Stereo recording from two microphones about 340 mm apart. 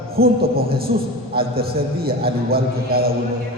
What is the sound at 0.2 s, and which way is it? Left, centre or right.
A man's voice, right.